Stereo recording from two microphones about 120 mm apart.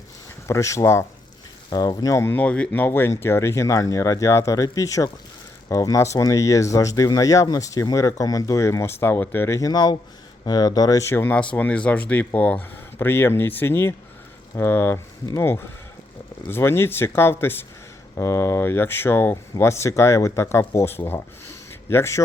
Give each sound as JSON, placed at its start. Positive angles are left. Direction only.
{"t": 0.4, "sound": "speech", "side_deg": 25}
{"t": 1.7, "sound": "speech", "side_deg": 35}
{"t": 2.1, "sound": "speech", "side_deg": 15}